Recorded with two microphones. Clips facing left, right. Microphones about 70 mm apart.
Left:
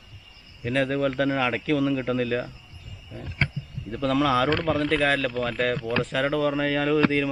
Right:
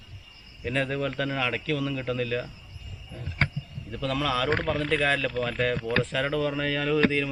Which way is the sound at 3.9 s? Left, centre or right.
Centre.